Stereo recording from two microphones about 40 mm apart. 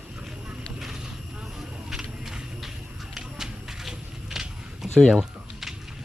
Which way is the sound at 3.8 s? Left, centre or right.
Centre.